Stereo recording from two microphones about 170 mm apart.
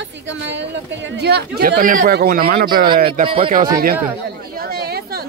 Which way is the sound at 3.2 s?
35° right (ahead or behind).